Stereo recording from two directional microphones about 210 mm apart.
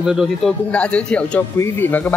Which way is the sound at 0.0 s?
Centre (ahead or behind).